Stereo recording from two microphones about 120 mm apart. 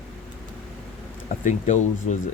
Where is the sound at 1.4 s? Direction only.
85° left.